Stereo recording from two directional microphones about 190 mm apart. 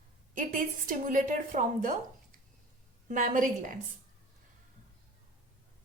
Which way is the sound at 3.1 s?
45° right (ahead or behind).